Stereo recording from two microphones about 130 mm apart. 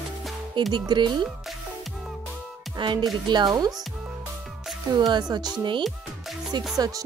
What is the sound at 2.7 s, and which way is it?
Music, 35° right (ahead or behind).